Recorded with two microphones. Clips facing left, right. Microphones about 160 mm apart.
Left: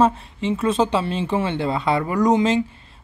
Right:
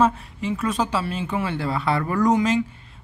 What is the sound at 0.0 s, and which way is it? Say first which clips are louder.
Speech: left 2 dB; 25° left (ahead or behind).